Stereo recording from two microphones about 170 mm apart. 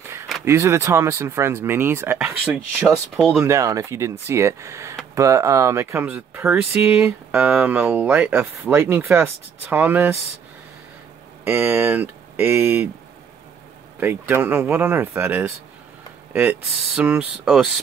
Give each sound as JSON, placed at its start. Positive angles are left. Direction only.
{"t": 0.5, "sound": "speech", "side_deg": -15}
{"t": 3.4, "sound": "speech", "side_deg": -20}
{"t": 11.4, "sound": "speech", "side_deg": -10}
{"t": 13.9, "sound": "speech", "side_deg": -10}